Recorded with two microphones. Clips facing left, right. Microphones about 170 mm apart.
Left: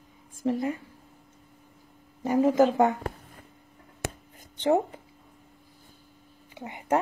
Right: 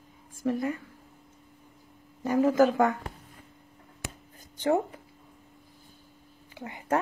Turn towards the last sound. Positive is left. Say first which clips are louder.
# left 2 dB
turn(degrees=20)  # may be behind; listen again after turning